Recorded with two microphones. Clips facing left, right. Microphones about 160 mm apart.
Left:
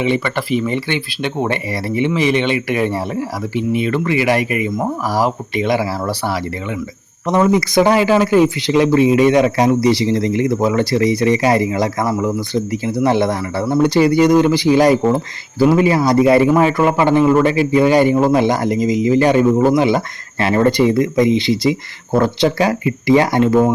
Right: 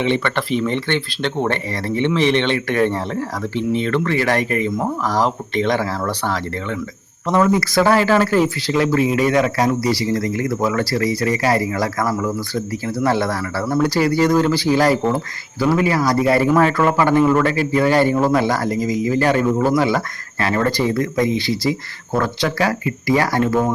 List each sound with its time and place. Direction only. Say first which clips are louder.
0.0 s speech: left 1 dB; 5° left (ahead or behind)